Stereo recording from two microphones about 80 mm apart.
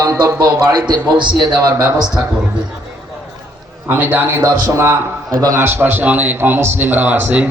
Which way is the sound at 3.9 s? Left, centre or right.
Right.